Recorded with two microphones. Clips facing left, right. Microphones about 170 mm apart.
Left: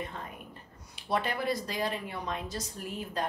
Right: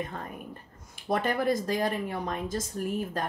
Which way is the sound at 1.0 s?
50° right (ahead or behind).